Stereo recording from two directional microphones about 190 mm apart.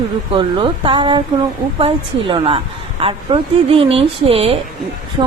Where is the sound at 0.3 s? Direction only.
25° right (ahead or behind).